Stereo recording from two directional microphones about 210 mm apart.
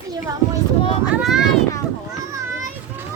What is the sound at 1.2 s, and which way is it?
Speech, centre (ahead or behind).